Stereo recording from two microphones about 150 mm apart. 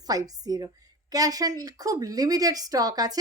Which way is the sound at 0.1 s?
25° right (ahead or behind).